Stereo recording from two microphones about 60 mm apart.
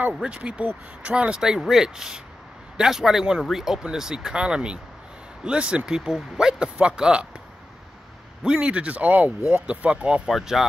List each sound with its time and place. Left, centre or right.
0.1 s speech: centre
8.5 s a man's voice: centre
10.2 s speech: centre